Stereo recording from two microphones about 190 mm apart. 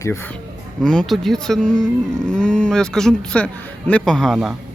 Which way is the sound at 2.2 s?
5° left (ahead or behind).